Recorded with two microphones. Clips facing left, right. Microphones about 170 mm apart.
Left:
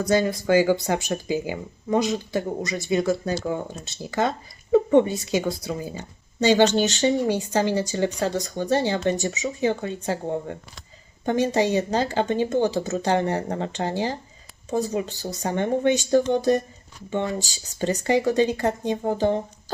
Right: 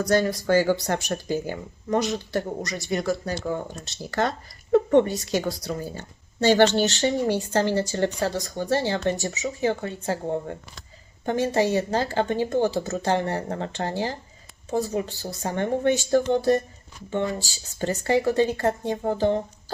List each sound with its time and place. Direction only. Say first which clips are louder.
0.1 s speech: left 1 dB; 15° left (ahead or behind)
2.6 s speech: left 3 dB; centre (ahead or behind)
3.0 s speech: left 3 dB; 20° left (ahead or behind)
5.4 s speech: left 1 dB; centre (ahead or behind)
5.8 s speech: left 1 dB; 15° left (ahead or behind)
11.3 s speech: left 1 dB; 15° left (ahead or behind)